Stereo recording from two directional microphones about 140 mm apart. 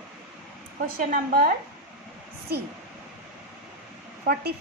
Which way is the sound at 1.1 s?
90° right.